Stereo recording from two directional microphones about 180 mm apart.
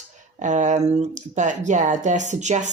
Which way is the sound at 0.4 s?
40° right (ahead or behind).